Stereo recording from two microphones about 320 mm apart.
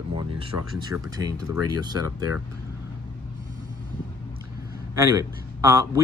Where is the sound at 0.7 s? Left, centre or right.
Centre.